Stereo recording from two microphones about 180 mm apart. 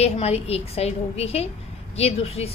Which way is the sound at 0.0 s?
35° left (ahead or behind).